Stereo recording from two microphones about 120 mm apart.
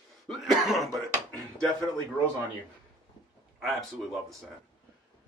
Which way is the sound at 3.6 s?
Centre (ahead or behind).